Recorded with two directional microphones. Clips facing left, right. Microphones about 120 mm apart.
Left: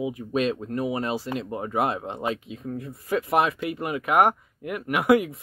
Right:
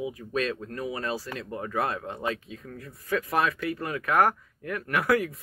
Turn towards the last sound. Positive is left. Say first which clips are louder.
# left 5 dB
turn(degrees=20)  # may be behind; listen again after turning